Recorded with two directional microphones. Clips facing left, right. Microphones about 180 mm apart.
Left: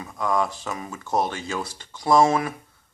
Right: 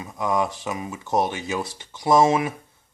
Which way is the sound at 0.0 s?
20° right (ahead or behind).